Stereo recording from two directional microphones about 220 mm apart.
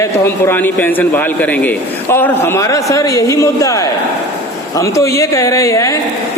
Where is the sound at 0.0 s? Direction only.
10° left (ahead or behind).